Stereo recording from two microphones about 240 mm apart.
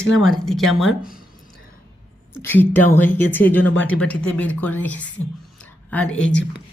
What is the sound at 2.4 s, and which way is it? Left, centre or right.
A woman's voice, centre.